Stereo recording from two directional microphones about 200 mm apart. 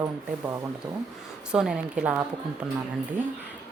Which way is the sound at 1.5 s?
5° right (ahead or behind).